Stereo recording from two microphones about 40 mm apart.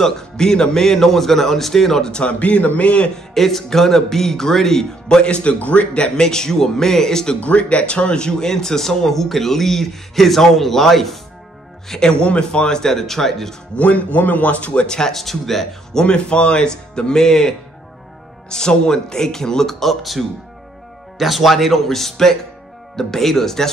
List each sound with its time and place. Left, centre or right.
0.0 s a man's voice: centre
2.3 s a man's voice: left
3.3 s a man's voice: centre
5.0 s speech: left
6.2 s a man's voice: centre
7.3 s a man's voice: left; by 11.1 s centre
11.9 s a man's voice: centre
13.7 s a man's voice: left
14.9 s a man's voice: centre
15.1 s a man's voice: centre